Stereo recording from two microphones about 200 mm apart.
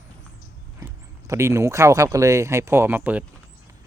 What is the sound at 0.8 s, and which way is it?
Speech, 15° right (ahead or behind).